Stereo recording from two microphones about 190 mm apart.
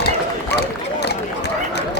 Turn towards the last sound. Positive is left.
turn(degrees=60)  # may be behind; listen again after turning